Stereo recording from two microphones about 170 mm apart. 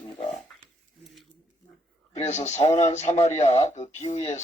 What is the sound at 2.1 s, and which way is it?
A man's voice, 40° left (ahead or behind).